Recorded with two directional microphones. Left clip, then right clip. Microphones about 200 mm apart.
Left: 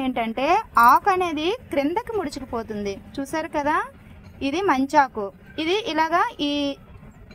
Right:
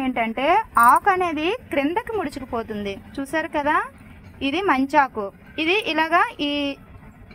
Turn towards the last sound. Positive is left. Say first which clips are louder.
# right 1 dB
turn(degrees=-15)  # may be behind; listen again after turning